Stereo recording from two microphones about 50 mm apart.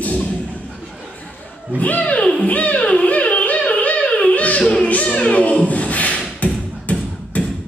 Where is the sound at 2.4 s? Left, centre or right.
Left.